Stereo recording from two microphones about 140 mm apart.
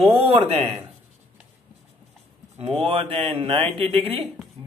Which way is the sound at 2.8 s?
40° right (ahead or behind).